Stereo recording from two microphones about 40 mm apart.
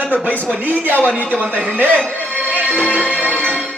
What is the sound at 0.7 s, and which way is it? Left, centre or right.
Speech, right.